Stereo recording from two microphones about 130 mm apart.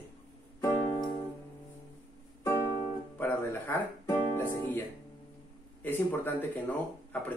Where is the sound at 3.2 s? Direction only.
15° left (ahead or behind).